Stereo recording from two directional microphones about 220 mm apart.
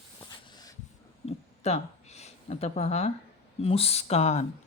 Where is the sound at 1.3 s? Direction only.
30° left (ahead or behind).